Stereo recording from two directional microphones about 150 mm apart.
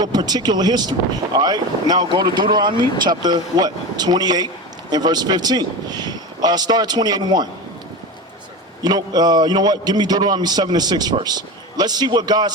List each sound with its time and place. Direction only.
0.0 s speech: 30° right (ahead or behind)
8.8 s speech: 25° right (ahead or behind)